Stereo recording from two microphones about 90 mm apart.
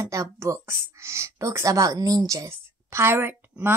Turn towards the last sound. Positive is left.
turn(degrees=-25)  # may be behind; listen again after turning